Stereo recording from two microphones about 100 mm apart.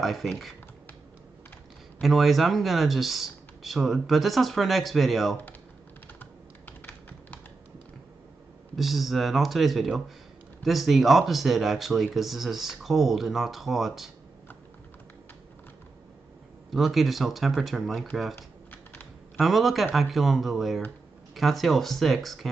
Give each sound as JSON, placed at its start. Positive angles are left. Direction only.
{"t": 0.0, "sound": "speech", "side_deg": 0}
{"t": 2.0, "sound": "speech", "side_deg": 0}
{"t": 8.7, "sound": "speech", "side_deg": 0}
{"t": 16.7, "sound": "speech", "side_deg": 0}
{"t": 18.3, "sound": "typing", "side_deg": 20}
{"t": 19.3, "sound": "speech", "side_deg": 0}